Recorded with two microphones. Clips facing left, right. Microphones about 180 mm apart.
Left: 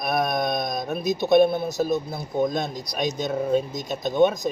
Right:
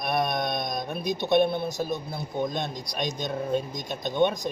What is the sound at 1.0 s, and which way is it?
Speech, 45° left (ahead or behind).